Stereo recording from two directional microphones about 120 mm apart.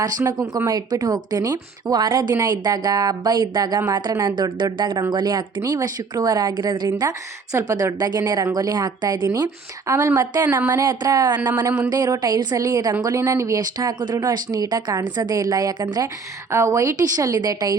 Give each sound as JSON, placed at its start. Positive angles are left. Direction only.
{"t": 0.0, "sound": "speech", "side_deg": -30}
{"t": 6.8, "sound": "a woman's voice", "side_deg": -25}
{"t": 10.4, "sound": "speech", "side_deg": -15}
{"t": 10.7, "sound": "a woman's voice", "side_deg": -30}